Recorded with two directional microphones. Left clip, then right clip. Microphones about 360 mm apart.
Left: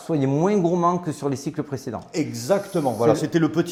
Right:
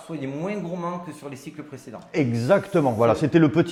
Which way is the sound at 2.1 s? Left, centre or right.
Centre.